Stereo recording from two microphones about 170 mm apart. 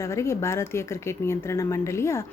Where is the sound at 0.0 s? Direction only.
15° left (ahead or behind).